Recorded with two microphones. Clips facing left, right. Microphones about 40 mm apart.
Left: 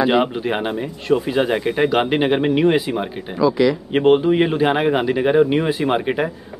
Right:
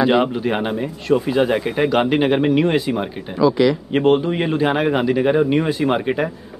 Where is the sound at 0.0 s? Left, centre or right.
Centre.